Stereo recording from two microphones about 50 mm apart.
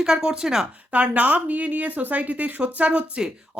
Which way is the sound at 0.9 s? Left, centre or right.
Right.